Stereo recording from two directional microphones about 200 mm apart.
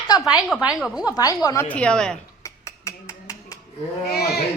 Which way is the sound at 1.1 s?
20° left (ahead or behind).